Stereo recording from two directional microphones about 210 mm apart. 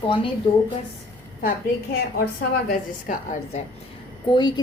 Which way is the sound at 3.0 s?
35° left (ahead or behind).